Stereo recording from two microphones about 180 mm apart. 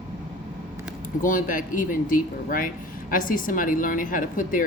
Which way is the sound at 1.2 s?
50° left (ahead or behind).